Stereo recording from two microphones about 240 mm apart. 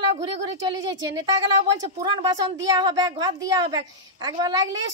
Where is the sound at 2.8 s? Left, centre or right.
Centre.